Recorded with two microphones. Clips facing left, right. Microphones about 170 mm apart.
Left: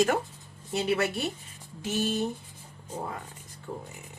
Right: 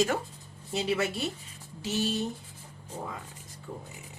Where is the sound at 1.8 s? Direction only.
55° left (ahead or behind).